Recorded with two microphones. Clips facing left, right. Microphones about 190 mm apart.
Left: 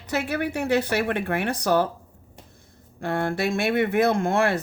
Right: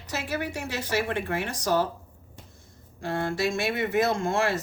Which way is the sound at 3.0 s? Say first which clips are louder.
Left 3 dB; 55° left (ahead or behind).